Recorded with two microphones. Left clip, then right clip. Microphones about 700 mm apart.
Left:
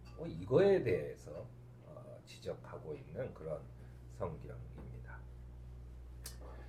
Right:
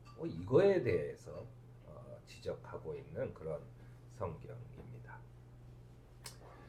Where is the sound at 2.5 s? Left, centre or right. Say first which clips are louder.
Right 2 dB; left.